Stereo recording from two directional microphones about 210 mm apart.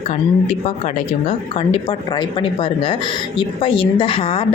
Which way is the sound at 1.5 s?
25° left (ahead or behind).